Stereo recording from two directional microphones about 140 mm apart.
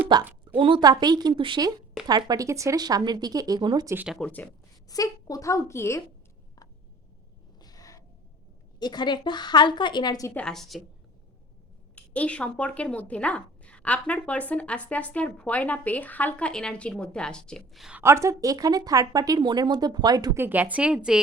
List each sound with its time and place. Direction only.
0.1 s a woman's voice: 30° right (ahead or behind)
3.8 s a woman's voice: 15° right (ahead or behind)
4.1 s speech: 10° left (ahead or behind)
4.9 s speech: 25° left (ahead or behind)
7.6 s gasp: 25° left (ahead or behind)
8.8 s a woman's voice: 30° left (ahead or behind)
10.3 s a woman's voice: 5° left (ahead or behind)
11.9 s speech: 10° left (ahead or behind)
18.0 s speech: 20° right (ahead or behind)
20.4 s a woman's voice: 10° right (ahead or behind)